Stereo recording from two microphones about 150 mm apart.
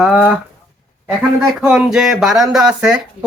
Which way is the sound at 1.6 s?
5° right (ahead or behind).